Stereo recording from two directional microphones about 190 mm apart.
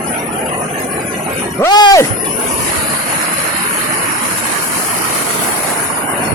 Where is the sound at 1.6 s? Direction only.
20° left (ahead or behind).